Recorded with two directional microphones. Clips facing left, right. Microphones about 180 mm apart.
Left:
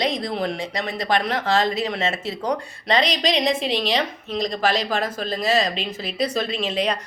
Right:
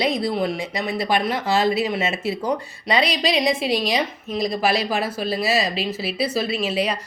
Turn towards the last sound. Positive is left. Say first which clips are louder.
# right 1 dB
turn(degrees=-5)  # may be behind; listen again after turning